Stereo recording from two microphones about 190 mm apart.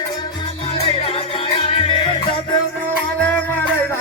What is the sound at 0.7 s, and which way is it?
Music, 30° left (ahead or behind).